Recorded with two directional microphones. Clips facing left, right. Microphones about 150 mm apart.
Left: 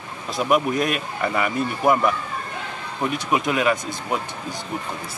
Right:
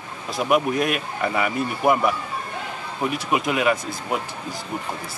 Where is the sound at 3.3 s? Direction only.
5° right (ahead or behind).